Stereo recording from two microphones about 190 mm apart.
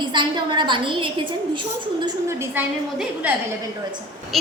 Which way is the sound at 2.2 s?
10° right (ahead or behind).